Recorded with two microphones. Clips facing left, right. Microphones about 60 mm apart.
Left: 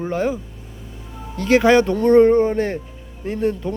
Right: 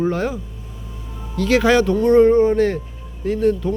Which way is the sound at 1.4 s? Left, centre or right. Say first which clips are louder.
Left 1 dB; left.